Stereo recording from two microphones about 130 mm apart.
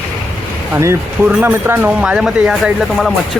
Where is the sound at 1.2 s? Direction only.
10° right (ahead or behind).